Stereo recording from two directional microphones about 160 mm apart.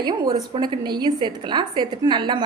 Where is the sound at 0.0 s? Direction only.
25° right (ahead or behind).